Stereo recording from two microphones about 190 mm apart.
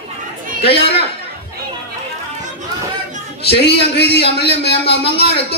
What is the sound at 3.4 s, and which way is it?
A man's voice, 60° left (ahead or behind).